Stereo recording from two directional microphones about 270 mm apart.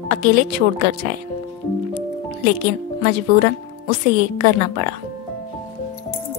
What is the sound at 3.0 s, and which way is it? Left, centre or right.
Speech, right.